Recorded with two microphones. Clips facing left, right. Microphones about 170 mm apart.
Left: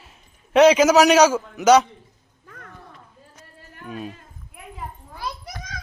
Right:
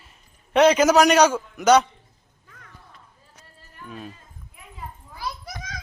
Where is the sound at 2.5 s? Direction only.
65° left (ahead or behind).